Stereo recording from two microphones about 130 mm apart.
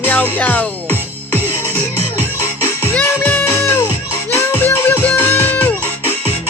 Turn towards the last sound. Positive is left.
turn(degrees=15)  # may be behind; listen again after turning